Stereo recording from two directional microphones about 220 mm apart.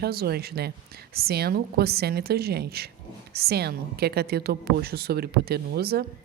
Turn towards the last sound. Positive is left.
turn(degrees=-45)  # may be behind; listen again after turning